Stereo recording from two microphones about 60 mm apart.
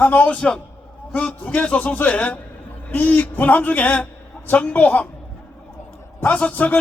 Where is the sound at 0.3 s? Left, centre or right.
Centre.